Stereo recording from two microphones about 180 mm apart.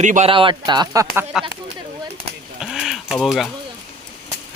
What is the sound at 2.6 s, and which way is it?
Typewriter, centre (ahead or behind).